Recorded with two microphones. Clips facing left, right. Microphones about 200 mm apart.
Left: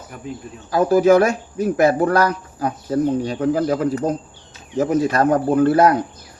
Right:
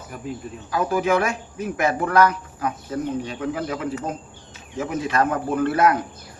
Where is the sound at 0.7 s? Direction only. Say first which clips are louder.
Left 8 dB; 35° left (ahead or behind).